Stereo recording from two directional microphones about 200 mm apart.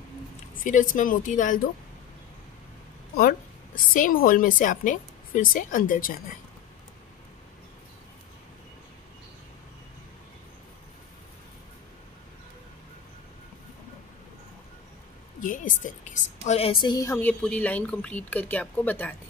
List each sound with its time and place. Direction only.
0.7 s a woman's voice: 40° left (ahead or behind)
3.9 s a woman's voice: 45° left (ahead or behind)
15.4 s a woman's voice: 40° left (ahead or behind); by 19.1 s 10° left (ahead or behind)